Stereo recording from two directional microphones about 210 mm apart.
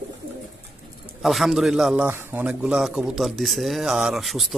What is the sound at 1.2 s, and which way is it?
A man's voice, centre (ahead or behind).